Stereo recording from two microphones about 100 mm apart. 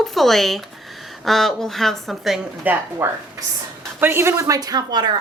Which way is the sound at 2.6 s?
20° right (ahead or behind).